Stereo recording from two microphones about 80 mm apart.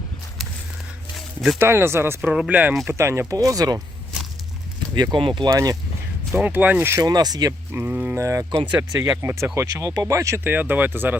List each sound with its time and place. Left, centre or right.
1.1 s a sound: centre
1.5 s speech: right
2.3 s speech: centre
2.9 s speech: right
3.3 s speech: right
5.1 s speech: right
5.5 s speech: right
6.3 s speech: right
7.0 s speech: right
7.7 s speech: right
8.1 s speech: right
8.6 s speech: centre
9.2 s speech: right
10.4 s speech: right